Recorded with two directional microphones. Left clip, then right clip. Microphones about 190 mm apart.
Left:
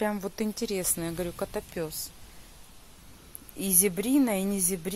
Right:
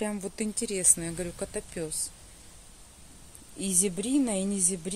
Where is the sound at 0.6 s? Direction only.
Centre (ahead or behind).